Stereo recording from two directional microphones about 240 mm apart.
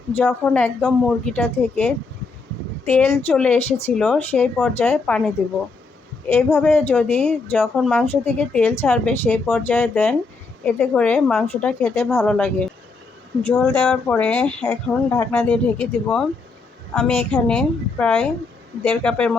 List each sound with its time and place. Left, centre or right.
0.1 s speech: centre
2.9 s speech: centre
6.3 s speech: centre